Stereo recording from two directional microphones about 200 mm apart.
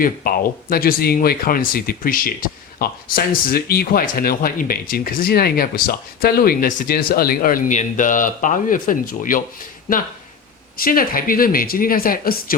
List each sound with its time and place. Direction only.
0.0 s speech: 45° left (ahead or behind)
10.8 s speech: 45° left (ahead or behind)